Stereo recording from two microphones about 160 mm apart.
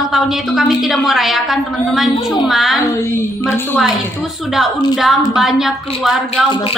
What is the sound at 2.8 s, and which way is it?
Music, 20° left (ahead or behind).